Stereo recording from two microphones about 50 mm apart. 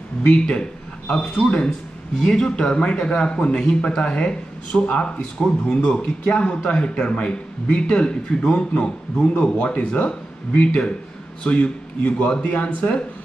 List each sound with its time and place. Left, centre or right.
0.2 s a man's voice: left